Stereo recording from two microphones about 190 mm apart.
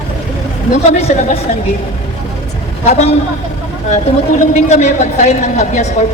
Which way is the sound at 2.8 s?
35° left (ahead or behind).